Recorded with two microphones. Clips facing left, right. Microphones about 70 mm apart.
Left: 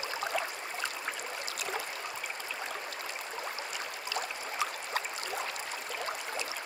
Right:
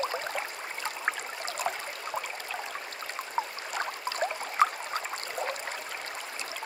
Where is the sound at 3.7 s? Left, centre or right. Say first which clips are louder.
Right 4 dB; right.